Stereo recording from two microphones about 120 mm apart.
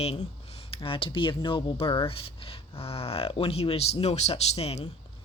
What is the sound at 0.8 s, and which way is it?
Speech, 50° left (ahead or behind).